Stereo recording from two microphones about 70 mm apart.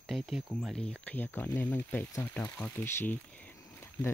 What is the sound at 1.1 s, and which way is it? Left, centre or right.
Speech, left.